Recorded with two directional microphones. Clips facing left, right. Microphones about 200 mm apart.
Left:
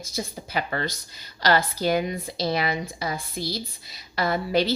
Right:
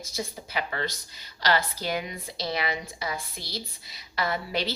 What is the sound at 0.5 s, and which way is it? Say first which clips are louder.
A woman's voice: left 3 dB; 45° left (ahead or behind).